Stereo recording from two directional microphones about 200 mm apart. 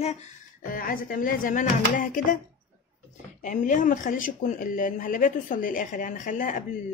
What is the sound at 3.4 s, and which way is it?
Speech, 40° left (ahead or behind).